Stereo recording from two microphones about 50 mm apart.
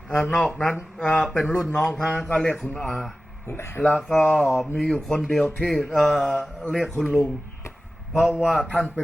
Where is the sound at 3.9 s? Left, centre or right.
Centre.